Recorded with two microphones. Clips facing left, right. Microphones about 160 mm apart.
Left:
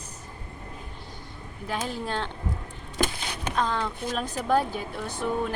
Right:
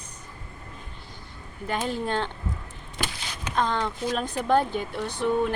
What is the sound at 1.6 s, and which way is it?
Speech, centre (ahead or behind).